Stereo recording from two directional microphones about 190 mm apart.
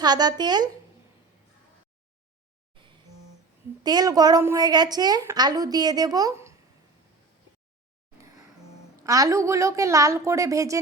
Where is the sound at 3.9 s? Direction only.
20° right (ahead or behind).